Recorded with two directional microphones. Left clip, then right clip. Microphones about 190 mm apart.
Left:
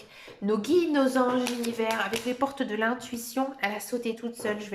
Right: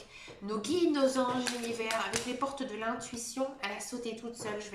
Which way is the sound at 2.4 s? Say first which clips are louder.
Left 8 dB; 45° left (ahead or behind).